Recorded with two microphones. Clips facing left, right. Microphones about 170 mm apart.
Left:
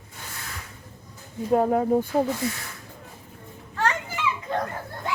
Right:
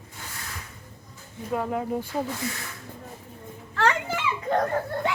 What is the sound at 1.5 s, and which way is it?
Speech, 40° left (ahead or behind).